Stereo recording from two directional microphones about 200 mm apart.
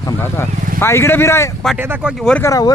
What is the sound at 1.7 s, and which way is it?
Speech, 10° right (ahead or behind).